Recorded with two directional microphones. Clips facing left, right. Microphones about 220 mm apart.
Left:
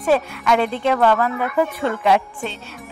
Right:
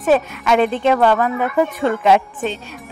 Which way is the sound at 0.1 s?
20° right (ahead or behind).